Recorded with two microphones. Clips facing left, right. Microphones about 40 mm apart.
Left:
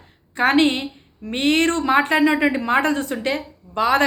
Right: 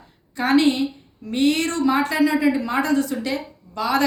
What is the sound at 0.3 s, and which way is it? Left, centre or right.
A woman's voice, left.